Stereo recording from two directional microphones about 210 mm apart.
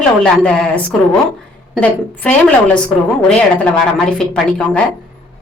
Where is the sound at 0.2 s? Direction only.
5° left (ahead or behind).